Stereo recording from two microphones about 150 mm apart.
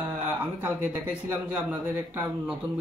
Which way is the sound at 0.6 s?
10° right (ahead or behind).